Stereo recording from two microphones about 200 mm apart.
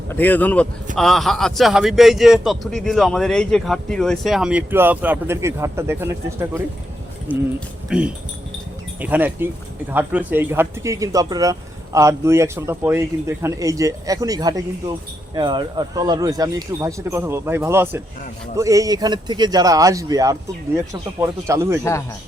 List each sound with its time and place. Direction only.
0.1 s a man's voice: 10° left (ahead or behind); by 21.8 s 15° right (ahead or behind)